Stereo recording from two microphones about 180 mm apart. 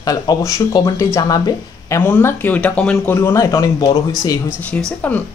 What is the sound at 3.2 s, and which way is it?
Speech, 15° left (ahead or behind).